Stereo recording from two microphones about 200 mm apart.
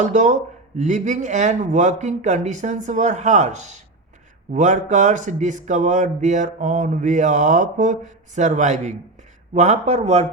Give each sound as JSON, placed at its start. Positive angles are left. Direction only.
{"t": 0.0, "sound": "speech", "side_deg": -35}